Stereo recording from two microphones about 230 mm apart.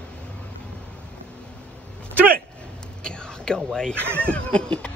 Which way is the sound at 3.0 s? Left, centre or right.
Centre.